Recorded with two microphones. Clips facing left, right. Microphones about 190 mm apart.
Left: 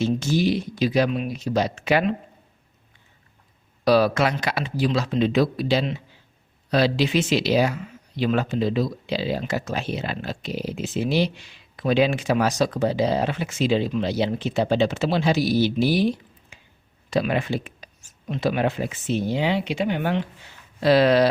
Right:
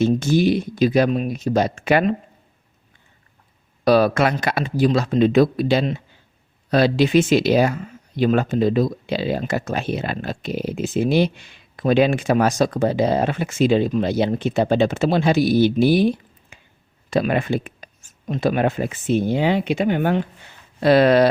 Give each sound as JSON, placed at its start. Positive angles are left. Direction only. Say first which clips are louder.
{"t": 0.0, "sound": "speech", "louder": "right 5 dB", "side_deg": -50}
{"t": 3.8, "sound": "speech", "louder": "right 3 dB", "side_deg": -50}